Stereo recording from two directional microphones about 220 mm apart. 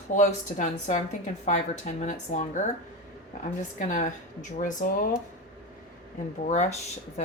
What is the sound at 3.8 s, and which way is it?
A woman's voice, 35° left (ahead or behind).